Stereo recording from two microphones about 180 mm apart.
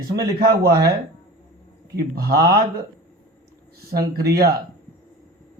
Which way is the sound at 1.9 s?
55° right (ahead or behind).